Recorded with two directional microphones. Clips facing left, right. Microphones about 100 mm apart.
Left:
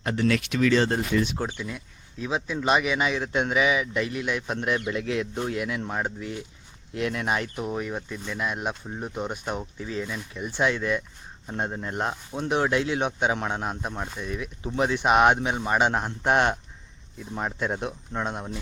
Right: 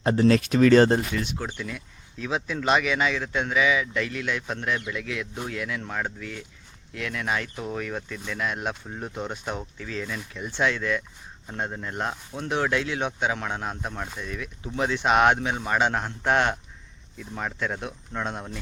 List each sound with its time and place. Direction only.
0.0 s speech: 30° right (ahead or behind)
1.5 s speech: 20° left (ahead or behind)
4.9 s speech: 30° left (ahead or behind)
7.5 s speech: 15° left (ahead or behind)
9.7 s speech: 20° left (ahead or behind)
10.1 s speech: 5° left (ahead or behind)